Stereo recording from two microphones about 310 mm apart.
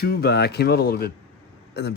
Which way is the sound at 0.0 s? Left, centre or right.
Left.